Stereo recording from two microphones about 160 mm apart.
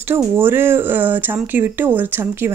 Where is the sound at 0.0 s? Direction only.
15° right (ahead or behind).